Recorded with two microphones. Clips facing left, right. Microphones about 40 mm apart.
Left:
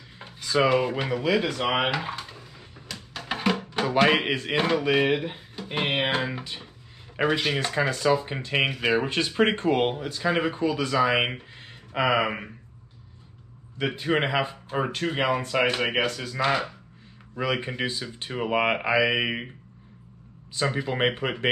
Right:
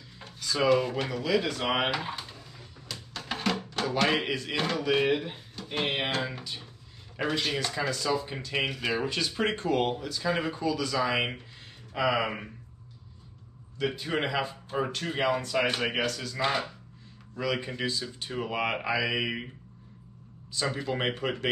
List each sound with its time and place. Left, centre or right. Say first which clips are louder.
0.2 s speech: left 5 dB; left
2.1 s music: left 3 dB; centre
4.3 s speech: left 6 dB; left
12.1 s speech: left 5 dB; centre
13.7 s speech: left 5 dB; left; by 16.7 s centre
17.4 s speech: left 3 dB; left
20.7 s speech: left 5 dB; left